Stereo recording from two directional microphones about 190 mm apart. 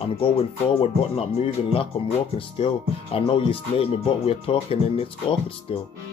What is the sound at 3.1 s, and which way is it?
Speech, 30° left (ahead or behind).